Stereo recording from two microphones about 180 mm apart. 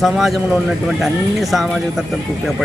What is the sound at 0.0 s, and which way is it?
Speech, centre (ahead or behind).